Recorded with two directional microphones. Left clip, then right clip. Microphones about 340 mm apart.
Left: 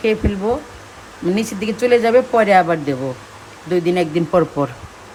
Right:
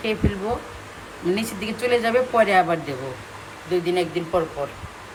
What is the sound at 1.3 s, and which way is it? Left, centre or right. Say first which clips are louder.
Speech: left 6 dB; centre.